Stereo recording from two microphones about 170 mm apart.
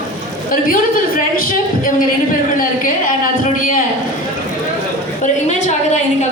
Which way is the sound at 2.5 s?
55° left (ahead or behind).